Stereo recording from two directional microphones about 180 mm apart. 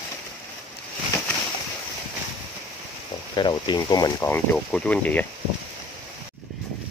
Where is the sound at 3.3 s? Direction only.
25° left (ahead or behind); by 5.2 s 5° left (ahead or behind).